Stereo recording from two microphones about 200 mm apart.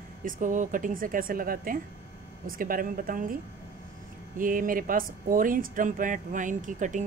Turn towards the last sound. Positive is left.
turn(degrees=-40)  # may be behind; listen again after turning